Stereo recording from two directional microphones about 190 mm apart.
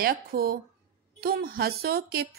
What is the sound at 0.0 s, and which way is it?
Speech, 50° right (ahead or behind).